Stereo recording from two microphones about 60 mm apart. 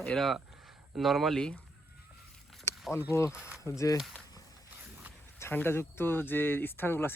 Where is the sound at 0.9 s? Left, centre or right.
Centre.